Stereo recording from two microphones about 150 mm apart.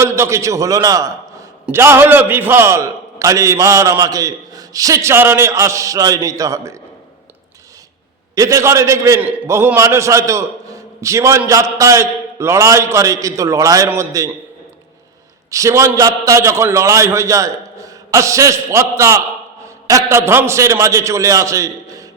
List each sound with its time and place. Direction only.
0.0 s a man's voice: 20° right (ahead or behind)
8.4 s a man's voice: 20° right (ahead or behind)
15.4 s a man's voice: 20° right (ahead or behind)